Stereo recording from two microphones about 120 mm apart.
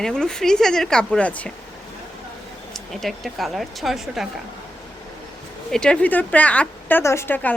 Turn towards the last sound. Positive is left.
turn(degrees=15)  # may be behind; listen again after turning